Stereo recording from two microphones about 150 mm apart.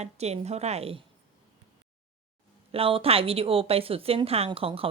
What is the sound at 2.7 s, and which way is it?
Speech, 40° right (ahead or behind).